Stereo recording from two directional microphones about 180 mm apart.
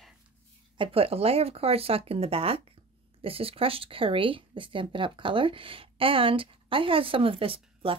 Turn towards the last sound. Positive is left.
turn(degrees=-30)  # may be behind; listen again after turning